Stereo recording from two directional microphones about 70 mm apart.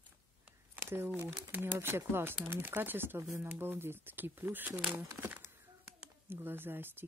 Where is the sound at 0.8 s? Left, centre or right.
Right.